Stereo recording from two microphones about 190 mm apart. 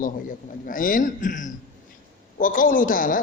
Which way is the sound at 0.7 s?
45° left (ahead or behind).